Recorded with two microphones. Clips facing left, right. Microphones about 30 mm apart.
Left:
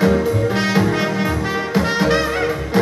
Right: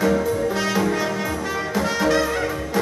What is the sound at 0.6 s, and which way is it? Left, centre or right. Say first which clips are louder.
Music: left 4 dB; left.